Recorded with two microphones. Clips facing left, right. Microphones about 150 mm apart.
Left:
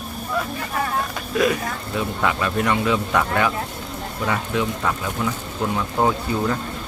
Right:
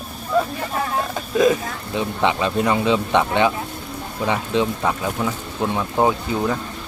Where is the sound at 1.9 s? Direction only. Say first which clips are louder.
Right 3 dB; 25° right (ahead or behind).